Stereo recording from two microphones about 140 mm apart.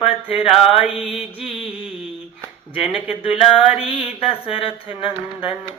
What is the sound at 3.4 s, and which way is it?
Mantra, 40° left (ahead or behind).